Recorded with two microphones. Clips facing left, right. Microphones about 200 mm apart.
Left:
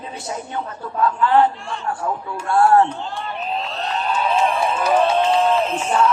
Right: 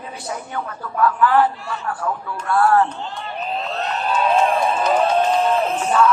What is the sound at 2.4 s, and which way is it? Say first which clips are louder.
Speech: left 2 dB; 25° left (ahead or behind).